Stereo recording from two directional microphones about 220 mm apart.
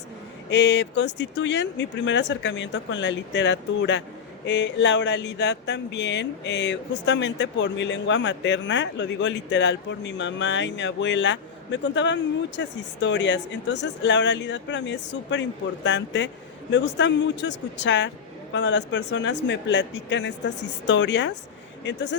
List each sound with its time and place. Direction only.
0.5 s speech: 55° left (ahead or behind)